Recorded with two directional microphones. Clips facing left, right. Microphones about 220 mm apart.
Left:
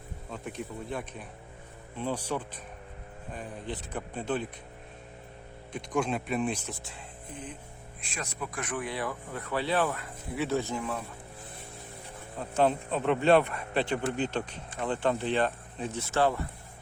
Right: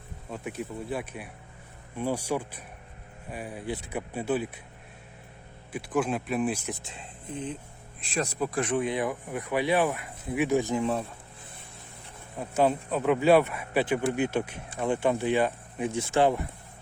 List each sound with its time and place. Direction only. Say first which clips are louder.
0.3 s speech: right 3 dB; 5° right (ahead or behind)
5.7 s speech: right 2 dB; 5° right (ahead or behind); by 7.0 s 20° right (ahead or behind)
8.1 s speech: right 9 dB; 35° right (ahead or behind); by 10.9 s 15° right (ahead or behind)
12.4 s speech: right 1 dB; 5° right (ahead or behind)